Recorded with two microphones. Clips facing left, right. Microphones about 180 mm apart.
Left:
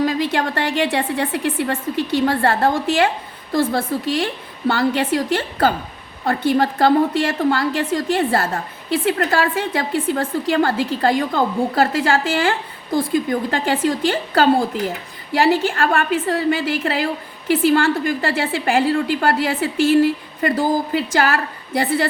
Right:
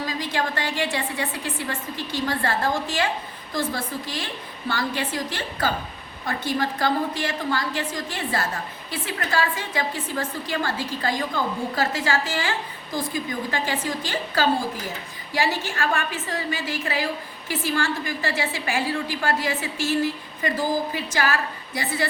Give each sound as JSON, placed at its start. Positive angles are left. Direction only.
{"t": 0.0, "sound": "a woman's voice", "side_deg": 65}